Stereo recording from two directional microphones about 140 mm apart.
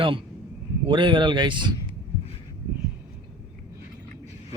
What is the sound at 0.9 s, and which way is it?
Speech, 35° right (ahead or behind).